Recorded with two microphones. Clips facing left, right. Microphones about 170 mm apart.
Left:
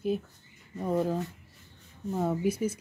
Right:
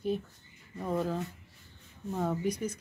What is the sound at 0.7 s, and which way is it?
Speech, 15° left (ahead or behind).